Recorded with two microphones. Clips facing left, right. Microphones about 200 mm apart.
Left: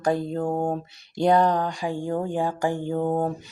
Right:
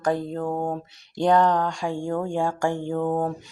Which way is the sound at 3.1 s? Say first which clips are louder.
Left 1 dB; 20° left (ahead or behind).